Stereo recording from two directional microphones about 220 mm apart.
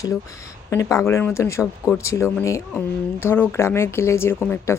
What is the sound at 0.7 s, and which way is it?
Speech, 15° left (ahead or behind).